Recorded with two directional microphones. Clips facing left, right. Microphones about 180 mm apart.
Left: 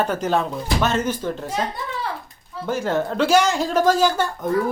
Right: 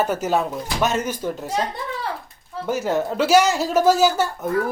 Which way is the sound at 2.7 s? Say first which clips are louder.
Even; 10° right (ahead or behind).